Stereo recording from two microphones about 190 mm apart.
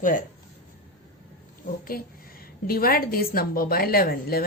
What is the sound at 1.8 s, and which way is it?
A woman's voice, 50° left (ahead or behind).